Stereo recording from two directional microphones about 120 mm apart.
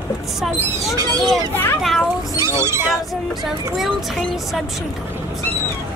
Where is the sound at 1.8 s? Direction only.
Centre (ahead or behind).